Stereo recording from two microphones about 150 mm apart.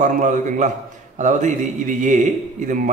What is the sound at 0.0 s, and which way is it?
A man's voice, 55° right (ahead or behind).